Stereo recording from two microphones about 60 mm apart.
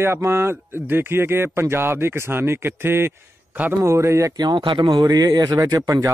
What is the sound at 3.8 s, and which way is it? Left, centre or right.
Speech, right.